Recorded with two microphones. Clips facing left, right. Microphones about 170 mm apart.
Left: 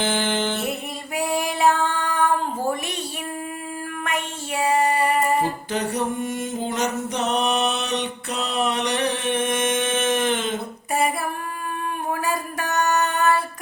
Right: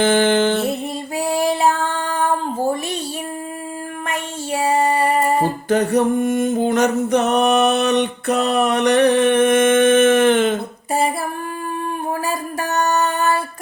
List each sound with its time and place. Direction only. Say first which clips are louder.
0.0 s music: right 8 dB; 60° right (ahead or behind)
0.7 s female singing: right 5 dB; 30° right (ahead or behind)
4.0 s child singing: right 2 dB; 30° right (ahead or behind)
5.4 s mantra: right 6 dB; 55° right (ahead or behind)
12.2 s a sound: right 3 dB; 30° right (ahead or behind)